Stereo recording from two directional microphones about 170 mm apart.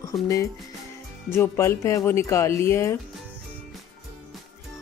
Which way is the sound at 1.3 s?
15° left (ahead or behind).